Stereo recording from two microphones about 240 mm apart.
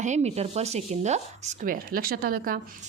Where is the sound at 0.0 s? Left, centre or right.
Right.